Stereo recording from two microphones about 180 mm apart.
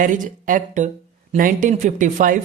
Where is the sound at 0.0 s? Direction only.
45° right (ahead or behind).